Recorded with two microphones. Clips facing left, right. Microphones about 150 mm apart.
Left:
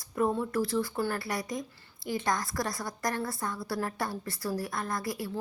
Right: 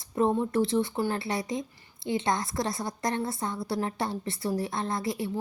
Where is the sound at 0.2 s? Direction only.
25° right (ahead or behind).